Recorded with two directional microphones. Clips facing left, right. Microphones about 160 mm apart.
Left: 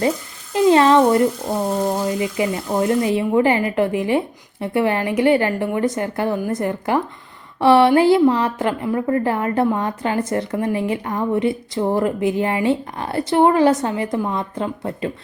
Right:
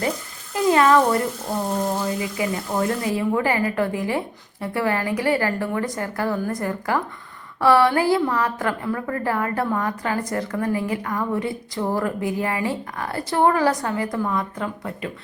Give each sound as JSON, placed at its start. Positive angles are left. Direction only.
{"t": 0.5, "sound": "a woman's voice", "side_deg": 25}